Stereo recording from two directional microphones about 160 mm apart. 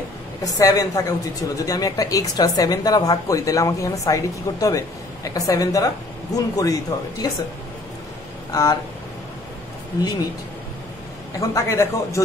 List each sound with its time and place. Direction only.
0.4 s speech: 20° left (ahead or behind)
8.5 s a sound: 20° left (ahead or behind)
11.3 s speech: 20° left (ahead or behind)